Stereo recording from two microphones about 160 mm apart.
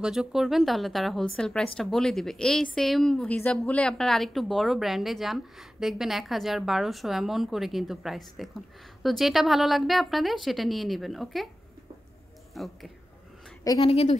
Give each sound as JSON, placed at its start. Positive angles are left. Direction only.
{"t": 0.0, "sound": "speech", "side_deg": -5}
{"t": 12.5, "sound": "speech", "side_deg": 0}
{"t": 13.7, "sound": "speech", "side_deg": 35}